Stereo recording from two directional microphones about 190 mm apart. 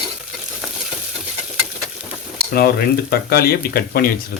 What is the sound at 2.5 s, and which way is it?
Speech, 55° left (ahead or behind).